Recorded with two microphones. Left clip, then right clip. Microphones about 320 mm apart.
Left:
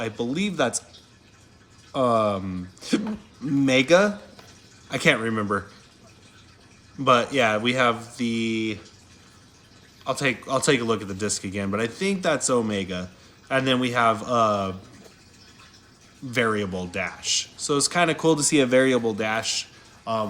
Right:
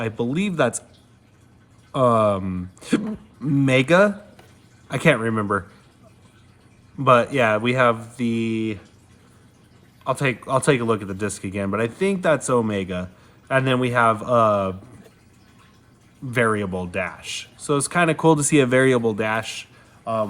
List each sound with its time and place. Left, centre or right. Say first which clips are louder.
0.0 s speech: right 2 dB; right
1.9 s speech: right 4 dB; right
7.0 s speech: right 3 dB; right
10.1 s speech: right 3 dB; right
16.3 s speech: right 3 dB; right